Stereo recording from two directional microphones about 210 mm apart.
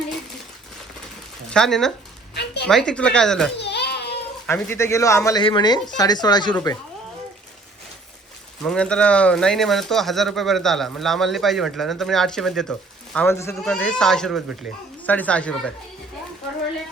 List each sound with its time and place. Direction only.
1.5 s speech: centre (ahead or behind)
2.3 s a sound: 55° left (ahead or behind)
2.6 s speech: 5° left (ahead or behind)
3.6 s goat: 55° left (ahead or behind)
4.4 s speech: 10° left (ahead or behind)
8.6 s speech: 5° left (ahead or behind)
13.1 s speech: 10° left (ahead or behind)